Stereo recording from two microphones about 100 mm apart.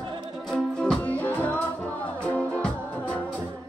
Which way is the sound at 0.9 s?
15° left (ahead or behind).